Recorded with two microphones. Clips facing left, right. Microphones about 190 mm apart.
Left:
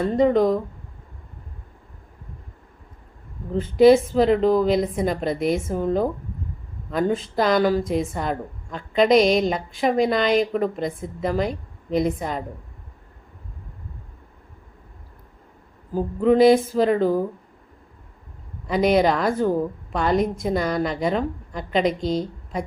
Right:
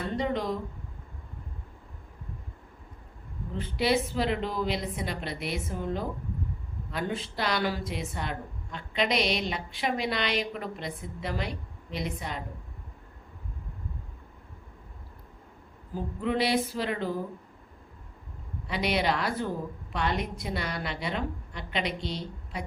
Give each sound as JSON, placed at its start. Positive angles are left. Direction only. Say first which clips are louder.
{"t": 0.0, "sound": "a woman's voice", "louder": "left 12 dB", "side_deg": 45}
{"t": 3.5, "sound": "a woman's voice", "louder": "left 13 dB", "side_deg": 45}
{"t": 15.9, "sound": "a woman's voice", "louder": "left 11 dB", "side_deg": 45}
{"t": 18.7, "sound": "a woman's voice", "louder": "left 10 dB", "side_deg": 45}